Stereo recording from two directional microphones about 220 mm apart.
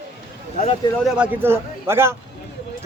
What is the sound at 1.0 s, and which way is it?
Speech, 5° right (ahead or behind).